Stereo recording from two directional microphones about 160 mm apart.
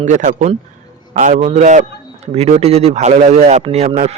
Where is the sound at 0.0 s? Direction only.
50° right (ahead or behind).